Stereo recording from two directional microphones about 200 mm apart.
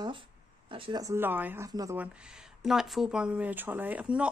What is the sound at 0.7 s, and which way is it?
Speech, 25° right (ahead or behind).